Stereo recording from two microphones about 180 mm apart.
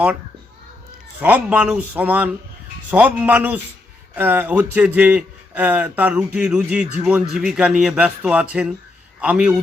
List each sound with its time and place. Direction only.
1.2 s a man's voice: 10° right (ahead or behind)